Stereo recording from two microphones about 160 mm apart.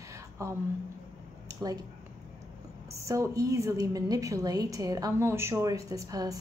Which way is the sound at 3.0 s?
20° right (ahead or behind).